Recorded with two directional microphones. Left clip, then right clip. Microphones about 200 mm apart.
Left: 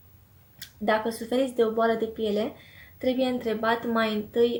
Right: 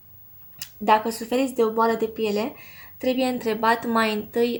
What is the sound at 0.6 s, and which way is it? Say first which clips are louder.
Speech: right 6 dB; 40° right (ahead or behind).